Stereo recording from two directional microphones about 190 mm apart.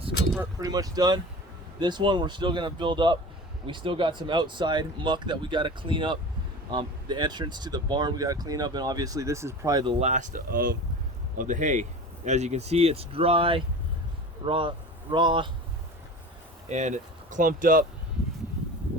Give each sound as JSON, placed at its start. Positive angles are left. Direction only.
{"t": 0.6, "sound": "speech", "side_deg": -20}
{"t": 10.0, "sound": "speech", "side_deg": -40}
{"t": 16.6, "sound": "speech", "side_deg": -40}